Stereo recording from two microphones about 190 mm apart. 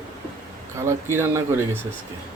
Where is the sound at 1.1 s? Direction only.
10° right (ahead or behind).